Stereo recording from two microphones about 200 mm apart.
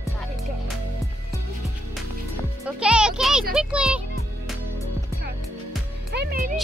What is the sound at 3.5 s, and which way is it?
Speech, 5° right (ahead or behind).